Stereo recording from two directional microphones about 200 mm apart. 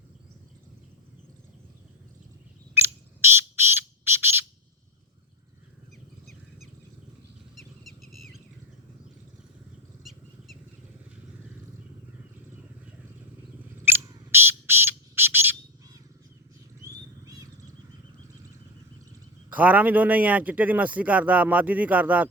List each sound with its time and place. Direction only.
3.5 s squawk: 10° right (ahead or behind)
8.0 s a sound: centre (ahead or behind)
10.0 s vehicle: centre (ahead or behind)
13.8 s bird: 10° right (ahead or behind)
16.8 s a sound: 15° right (ahead or behind)
19.5 s a man's voice: 5° right (ahead or behind)